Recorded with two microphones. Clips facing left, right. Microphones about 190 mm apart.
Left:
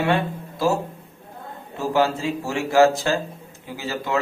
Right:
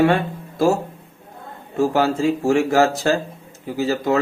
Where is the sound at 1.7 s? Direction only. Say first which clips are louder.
Right 3 dB; 45° right (ahead or behind).